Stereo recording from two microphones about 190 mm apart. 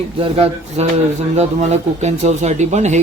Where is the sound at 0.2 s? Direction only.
30° right (ahead or behind).